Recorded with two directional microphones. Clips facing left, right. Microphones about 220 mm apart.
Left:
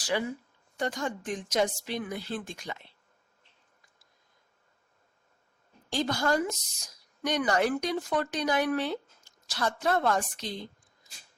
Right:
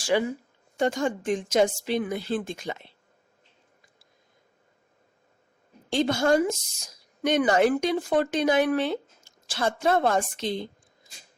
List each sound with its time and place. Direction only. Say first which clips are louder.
0.8 s speech: right 7 dB; 25° right (ahead or behind)
5.9 s a woman's voice: right 6 dB; 25° right (ahead or behind)